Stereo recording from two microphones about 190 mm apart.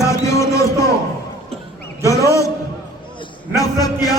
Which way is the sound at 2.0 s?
15° left (ahead or behind).